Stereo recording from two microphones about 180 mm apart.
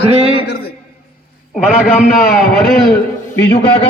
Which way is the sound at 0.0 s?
35° right (ahead or behind).